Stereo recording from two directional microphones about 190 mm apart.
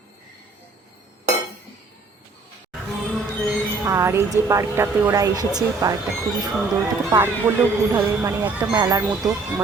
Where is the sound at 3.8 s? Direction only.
15° right (ahead or behind).